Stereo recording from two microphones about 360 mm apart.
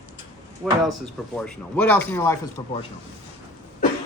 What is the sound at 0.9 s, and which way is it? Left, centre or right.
Speech, right.